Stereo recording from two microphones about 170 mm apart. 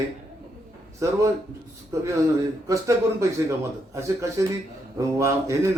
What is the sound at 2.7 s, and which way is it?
A man's voice, 20° right (ahead or behind).